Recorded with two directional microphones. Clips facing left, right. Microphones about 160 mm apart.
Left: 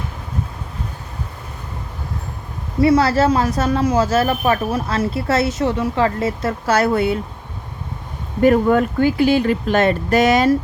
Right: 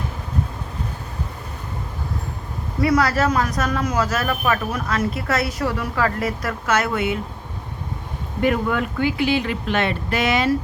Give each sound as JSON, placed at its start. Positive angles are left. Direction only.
{"t": 2.8, "sound": "speech", "side_deg": 30}
{"t": 8.4, "sound": "speech", "side_deg": 40}